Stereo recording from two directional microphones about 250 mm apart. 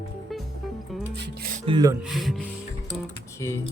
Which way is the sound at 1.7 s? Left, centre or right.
Centre.